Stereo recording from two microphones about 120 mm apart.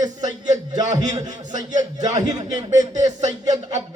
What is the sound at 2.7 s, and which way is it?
Speech, 90° right.